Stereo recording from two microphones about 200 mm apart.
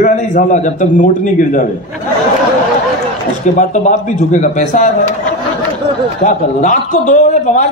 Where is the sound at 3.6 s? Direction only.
35° left (ahead or behind).